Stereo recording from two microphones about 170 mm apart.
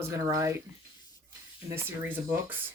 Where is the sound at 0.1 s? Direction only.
20° right (ahead or behind).